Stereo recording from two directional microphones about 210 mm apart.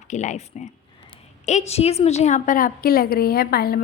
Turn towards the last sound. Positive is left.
turn(degrees=45)  # may be behind; listen again after turning